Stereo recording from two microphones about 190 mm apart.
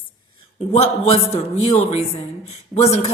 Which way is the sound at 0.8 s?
30° left (ahead or behind).